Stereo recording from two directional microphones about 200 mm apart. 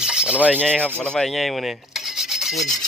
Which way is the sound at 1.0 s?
5° left (ahead or behind).